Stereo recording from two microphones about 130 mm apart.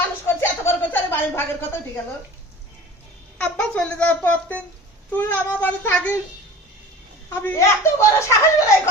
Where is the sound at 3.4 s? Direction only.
10° left (ahead or behind).